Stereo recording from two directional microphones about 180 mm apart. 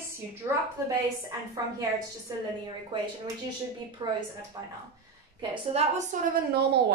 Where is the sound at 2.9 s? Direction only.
25° right (ahead or behind).